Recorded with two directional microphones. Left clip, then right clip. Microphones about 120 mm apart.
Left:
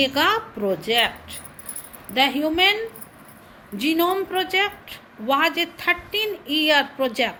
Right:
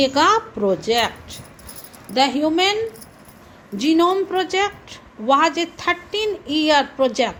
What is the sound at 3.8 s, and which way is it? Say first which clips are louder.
A woman's voice: right 4 dB; 50° right (ahead or behind).